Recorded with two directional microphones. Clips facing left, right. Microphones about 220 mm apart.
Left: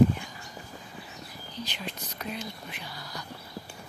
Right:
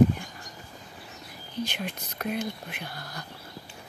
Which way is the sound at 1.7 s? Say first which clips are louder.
Right 3 dB; 55° right (ahead or behind).